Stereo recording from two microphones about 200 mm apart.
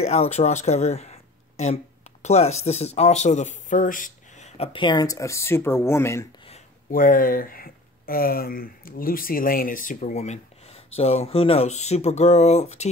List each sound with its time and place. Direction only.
0.0 s speech: 30° left (ahead or behind); by 6.2 s 15° left (ahead or behind)
6.9 s speech: 45° left (ahead or behind)